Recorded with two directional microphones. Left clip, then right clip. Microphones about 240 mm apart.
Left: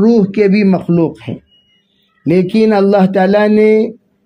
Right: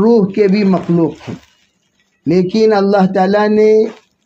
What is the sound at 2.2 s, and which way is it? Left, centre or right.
Speech, left.